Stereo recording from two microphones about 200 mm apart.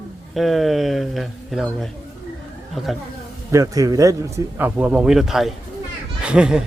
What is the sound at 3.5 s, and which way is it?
A man's voice, 15° right (ahead or behind).